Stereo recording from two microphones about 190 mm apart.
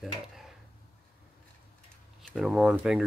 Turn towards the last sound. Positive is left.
turn(degrees=0)  # may be behind; listen again after turning